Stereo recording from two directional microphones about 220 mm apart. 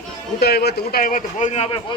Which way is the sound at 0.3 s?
45° left (ahead or behind).